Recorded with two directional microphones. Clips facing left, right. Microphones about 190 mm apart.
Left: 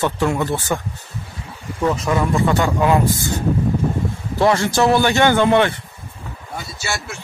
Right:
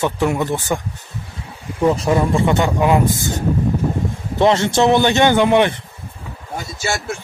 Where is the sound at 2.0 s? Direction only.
30° right (ahead or behind).